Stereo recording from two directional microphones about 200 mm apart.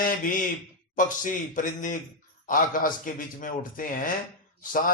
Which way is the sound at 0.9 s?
40° left (ahead or behind).